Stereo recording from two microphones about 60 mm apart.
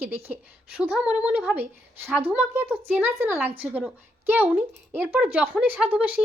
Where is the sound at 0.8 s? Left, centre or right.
Centre.